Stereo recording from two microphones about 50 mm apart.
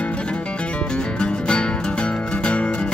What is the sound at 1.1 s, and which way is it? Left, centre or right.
Music, centre.